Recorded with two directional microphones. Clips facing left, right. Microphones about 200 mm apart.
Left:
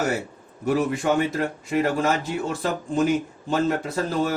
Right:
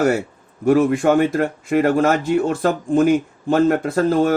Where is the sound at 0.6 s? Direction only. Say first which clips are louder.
Right 8 dB; 55° right (ahead or behind).